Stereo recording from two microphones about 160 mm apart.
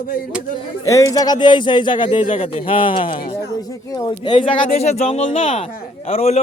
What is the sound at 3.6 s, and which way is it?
Speech, 25° left (ahead or behind).